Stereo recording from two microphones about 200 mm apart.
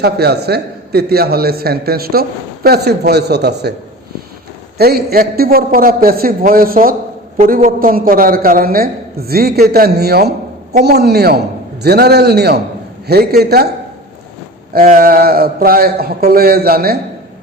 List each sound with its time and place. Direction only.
0.0 s a man's voice: 55° right (ahead or behind)
4.8 s a man's voice: 50° right (ahead or behind)
14.7 s a man's voice: 45° right (ahead or behind)